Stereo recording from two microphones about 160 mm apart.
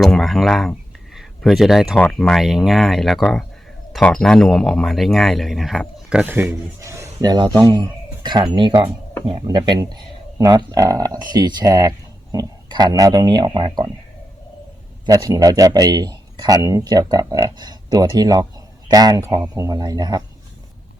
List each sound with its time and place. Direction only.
0.0 s speech: centre (ahead or behind); by 13.9 s 30° right (ahead or behind)
15.0 s speech: 25° right (ahead or behind)